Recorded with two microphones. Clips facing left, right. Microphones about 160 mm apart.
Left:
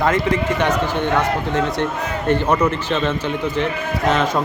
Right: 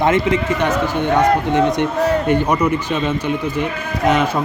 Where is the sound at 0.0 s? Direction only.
20° right (ahead or behind).